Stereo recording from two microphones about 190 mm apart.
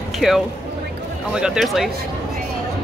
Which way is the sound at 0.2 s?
Centre (ahead or behind).